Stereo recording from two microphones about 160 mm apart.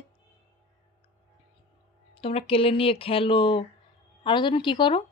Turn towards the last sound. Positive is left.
turn(degrees=30)  # may be behind; listen again after turning